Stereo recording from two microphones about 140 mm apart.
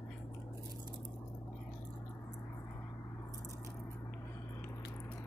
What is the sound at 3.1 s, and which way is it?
Squish, 20° left (ahead or behind).